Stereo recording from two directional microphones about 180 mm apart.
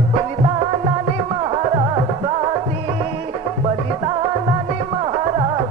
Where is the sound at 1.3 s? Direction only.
30° right (ahead or behind).